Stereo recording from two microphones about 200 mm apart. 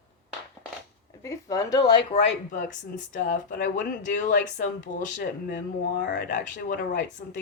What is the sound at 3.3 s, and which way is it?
Speech, 40° left (ahead or behind).